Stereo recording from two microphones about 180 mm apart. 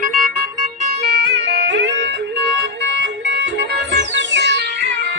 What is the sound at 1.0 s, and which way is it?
Music, 70° right (ahead or behind).